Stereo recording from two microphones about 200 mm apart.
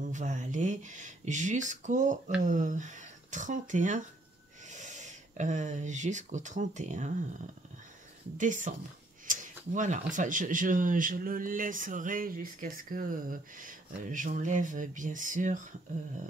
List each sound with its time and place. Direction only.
0.0 s speech: 35° right (ahead or behind)
8.4 s speech: 40° right (ahead or behind)